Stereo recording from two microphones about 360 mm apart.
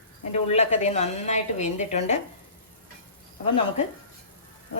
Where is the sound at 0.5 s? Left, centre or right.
Centre.